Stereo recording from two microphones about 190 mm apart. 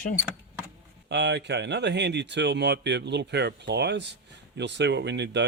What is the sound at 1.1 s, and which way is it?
Speech, 60° right (ahead or behind).